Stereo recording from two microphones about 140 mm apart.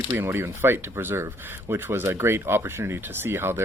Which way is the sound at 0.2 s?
20° right (ahead or behind).